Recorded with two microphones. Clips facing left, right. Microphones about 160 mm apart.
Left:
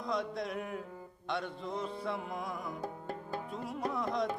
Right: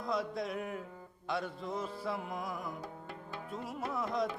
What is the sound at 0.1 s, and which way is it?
Music, centre (ahead or behind).